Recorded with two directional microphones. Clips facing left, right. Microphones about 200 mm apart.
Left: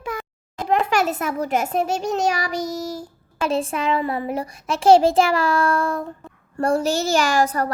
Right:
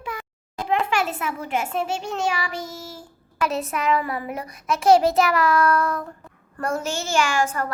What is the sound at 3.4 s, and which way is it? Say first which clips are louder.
Child singing: left 3 dB; 30° left (ahead or behind).